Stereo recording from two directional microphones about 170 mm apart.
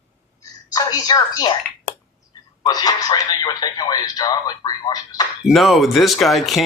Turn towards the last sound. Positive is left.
turn(degrees=0)  # may be behind; listen again after turning